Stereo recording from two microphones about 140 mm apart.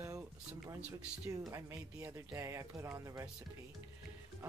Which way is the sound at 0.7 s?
10° right (ahead or behind).